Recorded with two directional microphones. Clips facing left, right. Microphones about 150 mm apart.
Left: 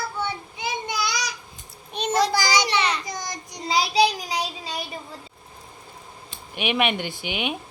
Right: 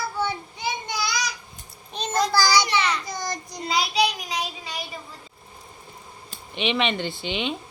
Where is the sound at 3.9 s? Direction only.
35° left (ahead or behind).